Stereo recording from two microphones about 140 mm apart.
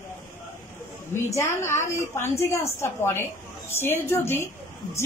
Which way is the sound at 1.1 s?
20° left (ahead or behind).